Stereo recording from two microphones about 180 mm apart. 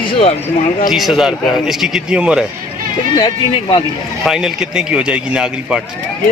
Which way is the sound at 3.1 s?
25° left (ahead or behind).